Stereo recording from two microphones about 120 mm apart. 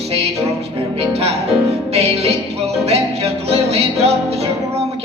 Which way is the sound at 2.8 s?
60° right (ahead or behind).